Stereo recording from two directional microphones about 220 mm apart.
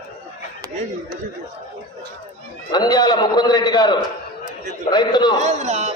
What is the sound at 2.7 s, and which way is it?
A man's voice, 20° left (ahead or behind).